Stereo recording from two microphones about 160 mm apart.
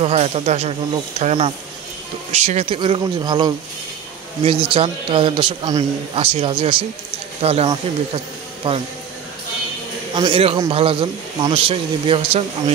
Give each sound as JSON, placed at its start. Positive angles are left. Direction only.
{"t": 0.0, "sound": "speech", "side_deg": -40}
{"t": 10.1, "sound": "speech", "side_deg": -30}